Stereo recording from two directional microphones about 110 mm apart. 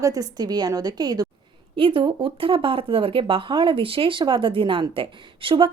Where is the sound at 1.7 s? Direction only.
55° right (ahead or behind).